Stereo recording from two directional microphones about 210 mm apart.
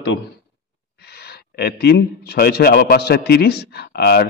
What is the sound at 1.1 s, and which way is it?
A man's voice, 50° left (ahead or behind).